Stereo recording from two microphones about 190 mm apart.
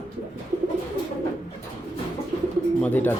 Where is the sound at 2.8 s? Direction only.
10° left (ahead or behind).